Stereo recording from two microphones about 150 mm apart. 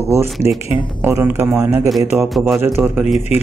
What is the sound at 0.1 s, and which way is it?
Speech, 15° right (ahead or behind).